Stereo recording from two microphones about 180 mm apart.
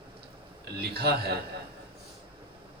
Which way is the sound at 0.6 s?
60° right (ahead or behind).